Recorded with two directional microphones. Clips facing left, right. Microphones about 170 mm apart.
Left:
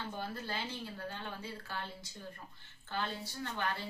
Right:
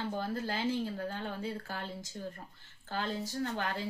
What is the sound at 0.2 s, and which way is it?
A woman's voice, 45° right (ahead or behind).